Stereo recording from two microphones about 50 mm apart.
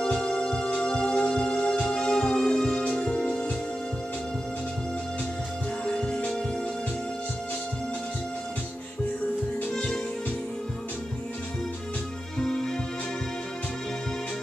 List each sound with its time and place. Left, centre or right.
0.0 s music: centre
5.9 s music: centre
12.4 s music: centre